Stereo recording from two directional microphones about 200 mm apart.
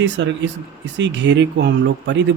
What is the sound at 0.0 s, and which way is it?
Speech, 65° right (ahead or behind).